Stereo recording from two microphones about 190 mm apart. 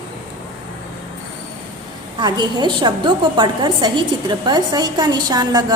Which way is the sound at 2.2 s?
25° right (ahead or behind).